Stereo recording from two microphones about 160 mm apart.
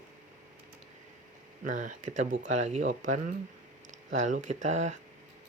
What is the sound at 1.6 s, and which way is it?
Speech, 55° right (ahead or behind).